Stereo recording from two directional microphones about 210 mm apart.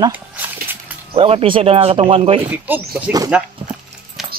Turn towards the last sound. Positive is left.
turn(degrees=0)  # may be behind; listen again after turning